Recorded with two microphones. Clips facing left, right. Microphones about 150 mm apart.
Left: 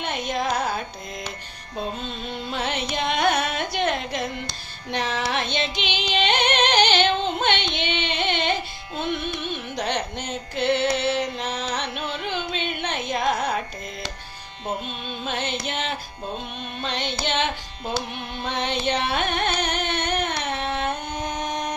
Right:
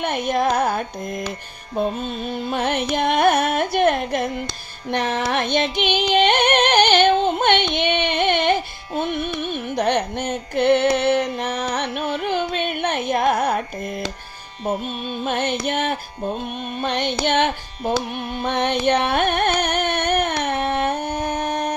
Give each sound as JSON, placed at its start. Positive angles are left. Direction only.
{"t": 0.0, "sound": "music", "side_deg": -55}
{"t": 1.7, "sound": "carnatic music", "side_deg": -50}
{"t": 4.9, "sound": "music", "side_deg": -55}